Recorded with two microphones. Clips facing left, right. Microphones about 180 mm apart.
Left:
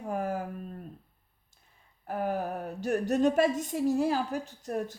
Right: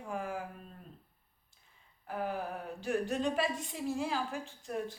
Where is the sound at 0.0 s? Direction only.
45° left (ahead or behind).